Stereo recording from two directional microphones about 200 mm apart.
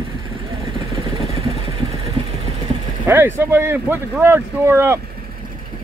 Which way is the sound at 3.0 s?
10° right (ahead or behind).